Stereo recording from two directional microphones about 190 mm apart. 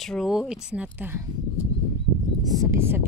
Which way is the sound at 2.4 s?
20° right (ahead or behind).